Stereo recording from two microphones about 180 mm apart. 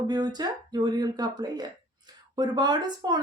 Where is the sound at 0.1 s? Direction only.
20° right (ahead or behind).